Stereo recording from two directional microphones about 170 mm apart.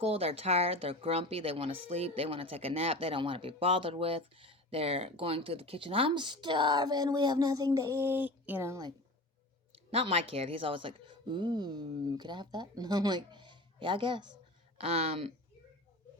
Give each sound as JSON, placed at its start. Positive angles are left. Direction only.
{"t": 0.0, "sound": "speech", "side_deg": -35}
{"t": 9.9, "sound": "speech", "side_deg": -35}